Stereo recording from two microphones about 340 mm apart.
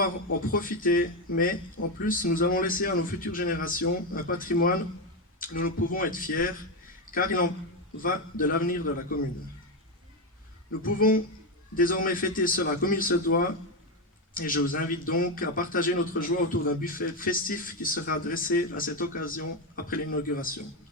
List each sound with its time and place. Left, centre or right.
0.5 s a man's voice: left
10.8 s a man's voice: left
14.3 s a man's voice: left